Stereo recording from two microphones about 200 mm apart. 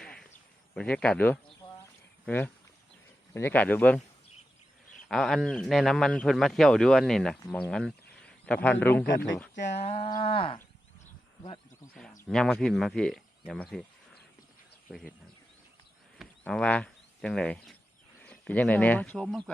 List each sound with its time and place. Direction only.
0.0 s a sound: 5° left (ahead or behind)
0.7 s speech: 5° left (ahead or behind)
5.0 s speech: centre (ahead or behind)
9.7 s livestock: 30° left (ahead or behind)
12.3 s speech: centre (ahead or behind)
14.8 s speech: 5° left (ahead or behind)
16.1 s speech: 5° left (ahead or behind)